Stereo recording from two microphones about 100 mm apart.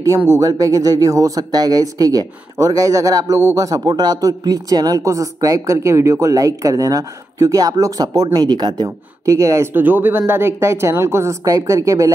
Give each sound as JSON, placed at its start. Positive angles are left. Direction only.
{"t": 0.0, "sound": "speech", "side_deg": -30}
{"t": 9.8, "sound": "speech", "side_deg": -20}